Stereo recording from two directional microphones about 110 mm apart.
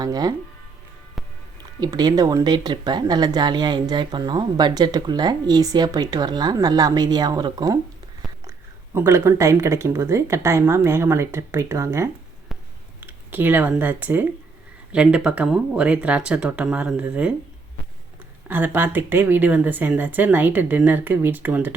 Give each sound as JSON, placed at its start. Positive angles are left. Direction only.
{"t": 0.0, "sound": "speech", "side_deg": -35}
{"t": 1.8, "sound": "speech", "side_deg": -35}
{"t": 2.4, "sound": "speech", "side_deg": -40}
{"t": 8.4, "sound": "speech", "side_deg": -25}
{"t": 13.1, "sound": "speech", "side_deg": -20}
{"t": 18.4, "sound": "speech", "side_deg": -15}